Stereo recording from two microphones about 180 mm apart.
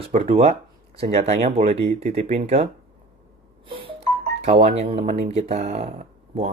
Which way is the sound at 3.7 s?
30° right (ahead or behind).